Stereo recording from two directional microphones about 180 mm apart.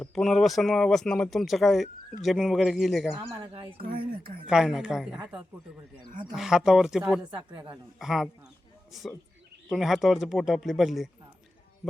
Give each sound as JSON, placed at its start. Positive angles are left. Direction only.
{"t": 0.0, "sound": "speech", "side_deg": 5}
{"t": 3.2, "sound": "speech", "side_deg": -30}
{"t": 4.4, "sound": "speech", "side_deg": 0}
{"t": 6.3, "sound": "speech", "side_deg": 0}